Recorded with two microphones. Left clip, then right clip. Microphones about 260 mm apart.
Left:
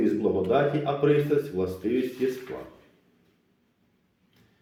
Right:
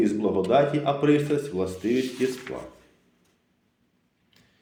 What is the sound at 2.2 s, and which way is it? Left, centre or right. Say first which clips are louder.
Speech: even; right.